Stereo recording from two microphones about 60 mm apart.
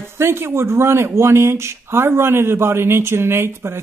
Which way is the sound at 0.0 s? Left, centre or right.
Right.